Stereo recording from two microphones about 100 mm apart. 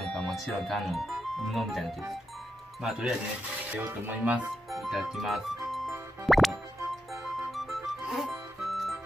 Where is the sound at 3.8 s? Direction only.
20° right (ahead or behind).